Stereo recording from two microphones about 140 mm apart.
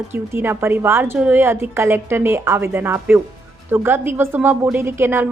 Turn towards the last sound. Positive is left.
turn(degrees=-15)  # may be behind; listen again after turning